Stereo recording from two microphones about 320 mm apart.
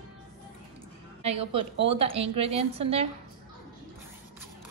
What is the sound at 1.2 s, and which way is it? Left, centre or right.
A woman's voice, centre.